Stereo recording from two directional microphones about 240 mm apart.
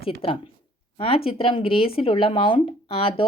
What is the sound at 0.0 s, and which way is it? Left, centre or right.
Speech, left.